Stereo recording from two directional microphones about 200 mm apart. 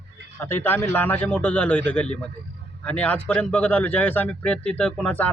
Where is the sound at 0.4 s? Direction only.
10° left (ahead or behind).